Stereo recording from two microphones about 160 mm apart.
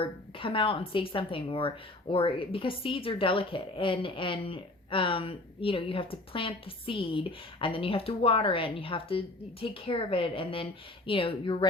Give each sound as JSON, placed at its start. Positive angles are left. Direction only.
{"t": 0.0, "sound": "a woman's voice", "side_deg": 35}